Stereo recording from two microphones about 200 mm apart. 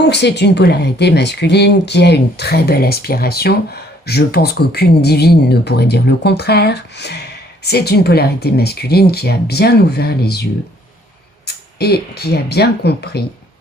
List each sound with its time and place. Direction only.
0.0 s speech: 55° left (ahead or behind)